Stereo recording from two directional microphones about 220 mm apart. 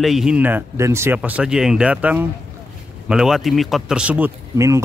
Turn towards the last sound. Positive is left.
turn(degrees=-10)  # may be behind; listen again after turning